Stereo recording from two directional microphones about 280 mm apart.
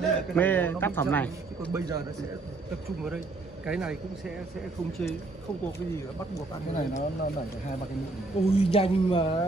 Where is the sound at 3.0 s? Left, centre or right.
Centre.